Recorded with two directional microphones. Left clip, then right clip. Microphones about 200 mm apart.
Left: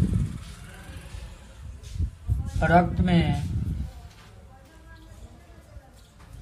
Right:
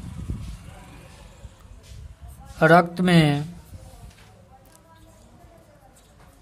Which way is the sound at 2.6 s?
55° right (ahead or behind).